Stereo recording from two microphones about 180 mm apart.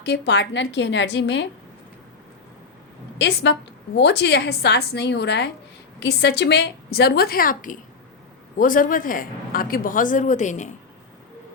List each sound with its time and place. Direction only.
0.0 s a woman's voice: 70° left (ahead or behind)
3.2 s a woman's voice: 75° left (ahead or behind); by 10.8 s 40° left (ahead or behind)